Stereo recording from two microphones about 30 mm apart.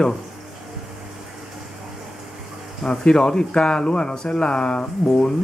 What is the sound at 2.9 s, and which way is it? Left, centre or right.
Speech, left.